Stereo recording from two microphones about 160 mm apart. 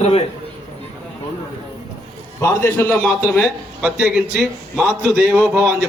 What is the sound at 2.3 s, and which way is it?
A man's voice, 15° left (ahead or behind).